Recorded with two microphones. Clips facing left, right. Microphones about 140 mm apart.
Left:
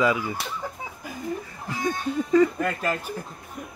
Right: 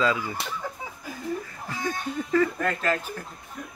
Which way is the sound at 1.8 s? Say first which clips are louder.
Left 4 dB; 15° left (ahead or behind).